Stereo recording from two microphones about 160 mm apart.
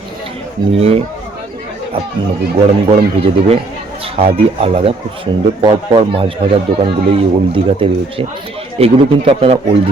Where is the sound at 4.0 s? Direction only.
35° right (ahead or behind).